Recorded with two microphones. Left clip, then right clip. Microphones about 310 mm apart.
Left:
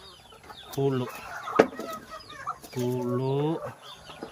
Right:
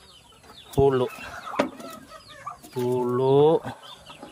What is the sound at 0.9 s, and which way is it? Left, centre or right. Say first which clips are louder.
Speech: right 6 dB; centre.